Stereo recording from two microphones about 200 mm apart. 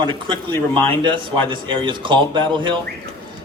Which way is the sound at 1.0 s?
25° right (ahead or behind).